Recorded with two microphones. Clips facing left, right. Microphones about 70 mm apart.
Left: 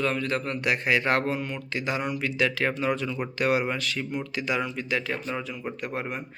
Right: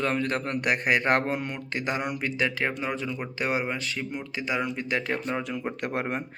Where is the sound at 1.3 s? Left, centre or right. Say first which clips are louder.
Even; right.